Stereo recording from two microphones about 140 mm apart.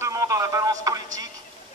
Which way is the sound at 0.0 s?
25° right (ahead or behind).